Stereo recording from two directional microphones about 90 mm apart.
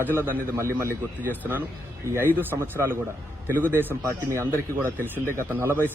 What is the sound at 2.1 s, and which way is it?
Speech, 20° right (ahead or behind).